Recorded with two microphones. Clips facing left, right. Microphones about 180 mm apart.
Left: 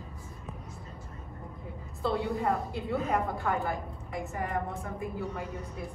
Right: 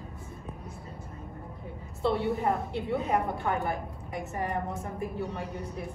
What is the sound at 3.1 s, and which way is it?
A woman's voice, centre (ahead or behind).